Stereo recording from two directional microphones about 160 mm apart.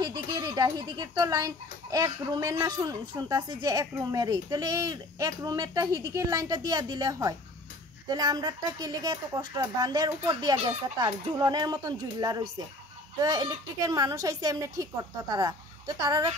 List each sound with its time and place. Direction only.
0.0 s speech: 25° right (ahead or behind)